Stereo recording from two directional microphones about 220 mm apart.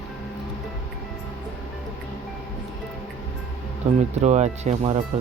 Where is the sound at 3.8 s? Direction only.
25° right (ahead or behind).